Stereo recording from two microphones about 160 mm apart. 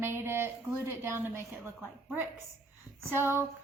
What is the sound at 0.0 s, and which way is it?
Child singing, 15° right (ahead or behind).